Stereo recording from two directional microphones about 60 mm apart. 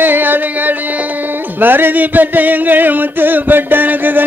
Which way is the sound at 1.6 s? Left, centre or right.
Right.